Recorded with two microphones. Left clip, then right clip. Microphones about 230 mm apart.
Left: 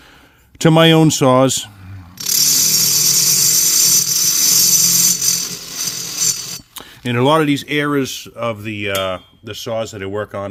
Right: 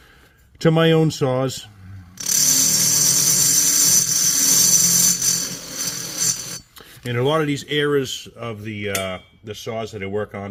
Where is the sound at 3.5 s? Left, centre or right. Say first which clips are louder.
Left 3 dB; left.